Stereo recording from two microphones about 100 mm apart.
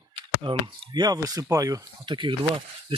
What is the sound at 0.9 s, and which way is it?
Speech, 40° right (ahead or behind).